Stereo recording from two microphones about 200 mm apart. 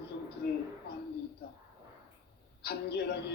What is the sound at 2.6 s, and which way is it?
Speech, 55° left (ahead or behind).